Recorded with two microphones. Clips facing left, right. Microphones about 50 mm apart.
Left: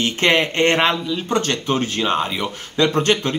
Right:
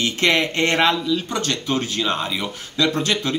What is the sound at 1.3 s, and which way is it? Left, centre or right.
Speech, left.